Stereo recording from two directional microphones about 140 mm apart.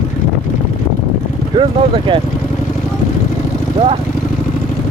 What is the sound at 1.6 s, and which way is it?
Speech, 35° right (ahead or behind).